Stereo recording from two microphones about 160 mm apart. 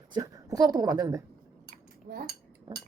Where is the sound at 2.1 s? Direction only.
60° right (ahead or behind).